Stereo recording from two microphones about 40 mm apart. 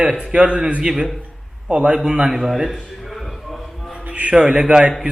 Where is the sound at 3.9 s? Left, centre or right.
Right.